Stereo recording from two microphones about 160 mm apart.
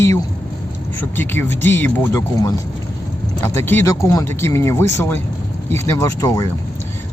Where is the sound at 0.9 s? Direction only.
10° left (ahead or behind).